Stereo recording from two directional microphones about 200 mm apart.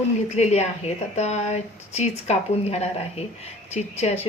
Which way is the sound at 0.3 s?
35° left (ahead or behind).